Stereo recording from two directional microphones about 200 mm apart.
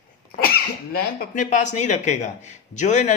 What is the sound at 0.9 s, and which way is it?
A man's voice, 45° left (ahead or behind).